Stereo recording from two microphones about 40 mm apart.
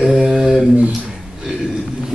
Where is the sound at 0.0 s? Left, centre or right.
Centre.